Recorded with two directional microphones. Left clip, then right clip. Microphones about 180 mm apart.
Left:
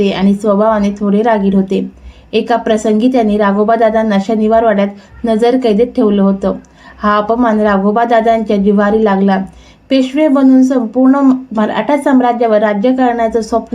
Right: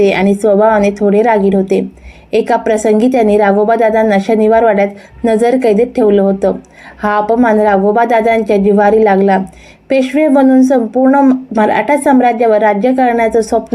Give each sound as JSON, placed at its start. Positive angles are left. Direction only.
{"t": 0.0, "sound": "a woman's voice", "side_deg": -15}